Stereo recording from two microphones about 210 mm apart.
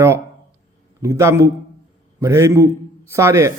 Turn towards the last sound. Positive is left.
turn(degrees=-15)  # may be behind; listen again after turning